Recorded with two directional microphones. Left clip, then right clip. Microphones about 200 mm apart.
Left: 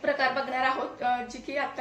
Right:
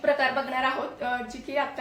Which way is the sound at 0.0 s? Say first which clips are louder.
Right 2 dB; centre (ahead or behind).